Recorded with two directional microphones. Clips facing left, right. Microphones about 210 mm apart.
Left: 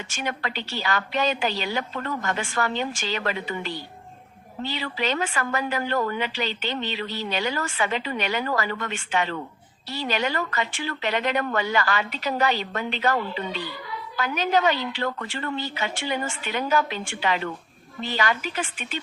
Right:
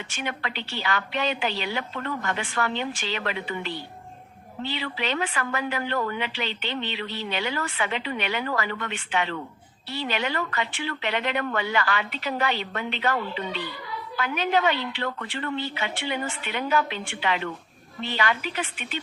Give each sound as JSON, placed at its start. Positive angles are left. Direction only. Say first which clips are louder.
{"t": 0.1, "sound": "a woman's voice", "louder": "left 3 dB", "side_deg": 40}